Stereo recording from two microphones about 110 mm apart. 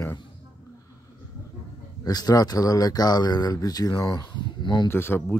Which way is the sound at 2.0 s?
35° left (ahead or behind).